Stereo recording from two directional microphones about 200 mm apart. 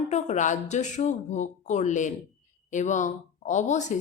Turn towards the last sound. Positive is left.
turn(degrees=35)  # may be behind; listen again after turning